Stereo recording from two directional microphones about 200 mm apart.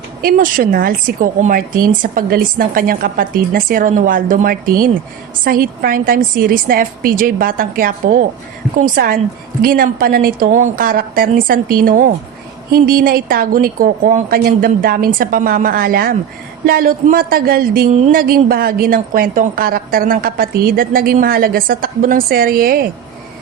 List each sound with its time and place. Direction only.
0.2 s speech: 45° right (ahead or behind)